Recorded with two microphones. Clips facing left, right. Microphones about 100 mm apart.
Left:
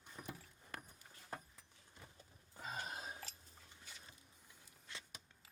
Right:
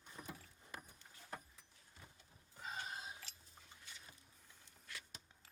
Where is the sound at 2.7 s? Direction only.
50° left (ahead or behind).